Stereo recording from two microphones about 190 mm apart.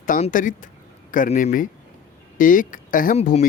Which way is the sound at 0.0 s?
45° left (ahead or behind).